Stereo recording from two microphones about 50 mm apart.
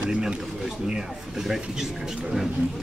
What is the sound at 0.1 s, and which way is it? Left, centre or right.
Speech, centre.